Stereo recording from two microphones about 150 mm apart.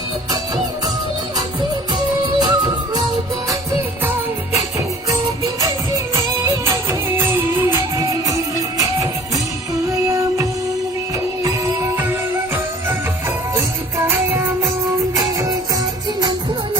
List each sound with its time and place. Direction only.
2.4 s music: 25° right (ahead or behind)
4.0 s music: 15° right (ahead or behind)
7.2 s music: 15° right (ahead or behind)
14.3 s music: 15° right (ahead or behind)